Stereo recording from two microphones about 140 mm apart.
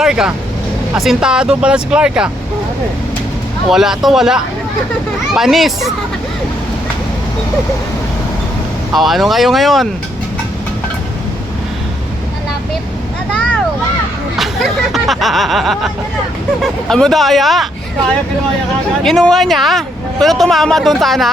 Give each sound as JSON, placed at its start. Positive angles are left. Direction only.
{"t": 0.0, "sound": "speech", "side_deg": -5}
{"t": 3.7, "sound": "speech", "side_deg": -5}
{"t": 8.9, "sound": "speech", "side_deg": 0}
{"t": 13.3, "sound": "vehicle", "side_deg": 5}
{"t": 14.3, "sound": "speech", "side_deg": 0}
{"t": 16.9, "sound": "speech", "side_deg": 5}
{"t": 19.0, "sound": "speech", "side_deg": 0}